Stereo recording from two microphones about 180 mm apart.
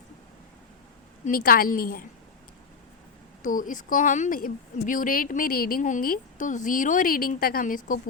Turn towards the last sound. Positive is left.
turn(degrees=50)  # may be behind; listen again after turning